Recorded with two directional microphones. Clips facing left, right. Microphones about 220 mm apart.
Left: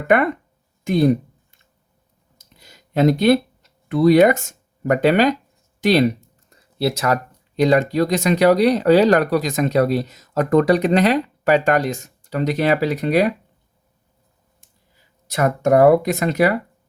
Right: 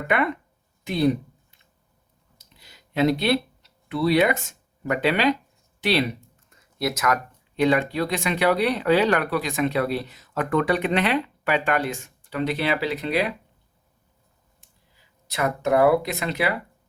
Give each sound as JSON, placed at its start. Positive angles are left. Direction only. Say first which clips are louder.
{"t": 0.1, "sound": "speech", "louder": "left 7 dB", "side_deg": 45}
{"t": 0.9, "sound": "a sound", "louder": "left 5 dB", "side_deg": 45}
{"t": 6.7, "sound": "speech", "louder": "left 5 dB", "side_deg": 30}
{"t": 15.3, "sound": "speech", "louder": "left 6 dB", "side_deg": 45}